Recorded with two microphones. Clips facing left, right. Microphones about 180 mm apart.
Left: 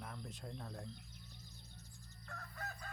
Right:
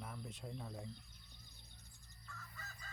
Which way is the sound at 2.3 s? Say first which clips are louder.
Left 7 dB; 60° left (ahead or behind).